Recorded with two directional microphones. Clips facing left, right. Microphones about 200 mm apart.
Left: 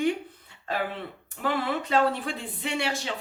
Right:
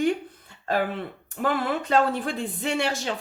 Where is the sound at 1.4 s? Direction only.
45° right (ahead or behind).